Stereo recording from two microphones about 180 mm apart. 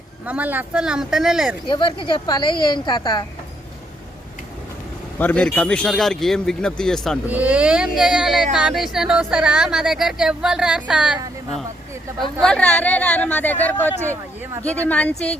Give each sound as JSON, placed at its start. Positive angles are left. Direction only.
{"t": 0.3, "sound": "speech", "side_deg": -10}
{"t": 1.6, "sound": "a woman's voice", "side_deg": 25}
{"t": 5.2, "sound": "speech", "side_deg": 5}
{"t": 7.3, "sound": "speech", "side_deg": -10}
{"t": 12.2, "sound": "speech", "side_deg": 5}